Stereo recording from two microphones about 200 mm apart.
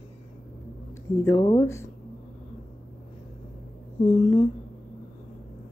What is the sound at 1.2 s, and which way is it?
Speech, 20° left (ahead or behind).